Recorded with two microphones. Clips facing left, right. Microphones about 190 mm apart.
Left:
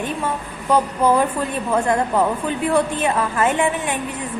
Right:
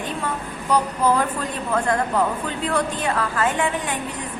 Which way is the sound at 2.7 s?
20° left (ahead or behind).